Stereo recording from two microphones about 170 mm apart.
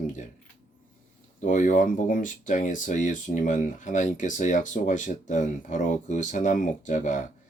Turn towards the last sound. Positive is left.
turn(degrees=45)  # may be behind; listen again after turning